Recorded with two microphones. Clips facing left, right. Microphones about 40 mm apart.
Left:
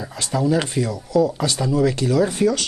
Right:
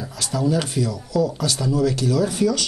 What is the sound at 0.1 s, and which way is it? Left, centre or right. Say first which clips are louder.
Speech: left 2 dB; left.